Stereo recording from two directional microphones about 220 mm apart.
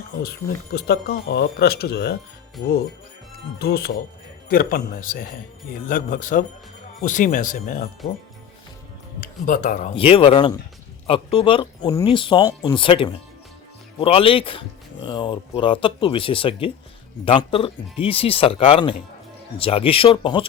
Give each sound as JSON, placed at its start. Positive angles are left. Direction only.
{"t": 0.2, "sound": "speech", "side_deg": 45}
{"t": 3.6, "sound": "speech", "side_deg": 45}
{"t": 9.2, "sound": "speech", "side_deg": 35}
{"t": 9.9, "sound": "speech", "side_deg": 25}